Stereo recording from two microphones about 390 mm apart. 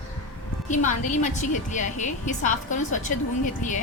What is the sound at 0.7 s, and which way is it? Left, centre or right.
A woman's voice, centre.